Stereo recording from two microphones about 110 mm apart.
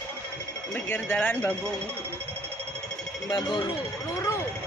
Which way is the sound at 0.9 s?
15° left (ahead or behind).